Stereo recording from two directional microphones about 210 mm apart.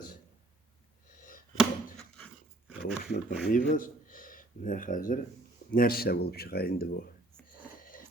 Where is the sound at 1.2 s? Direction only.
40° left (ahead or behind).